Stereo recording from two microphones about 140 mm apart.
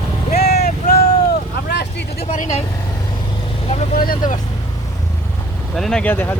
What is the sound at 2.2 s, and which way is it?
Vehicle, 65° left (ahead or behind).